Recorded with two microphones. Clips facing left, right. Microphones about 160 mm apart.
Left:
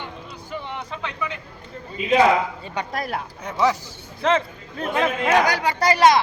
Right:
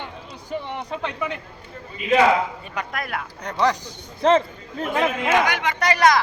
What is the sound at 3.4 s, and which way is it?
Speech, 5° left (ahead or behind).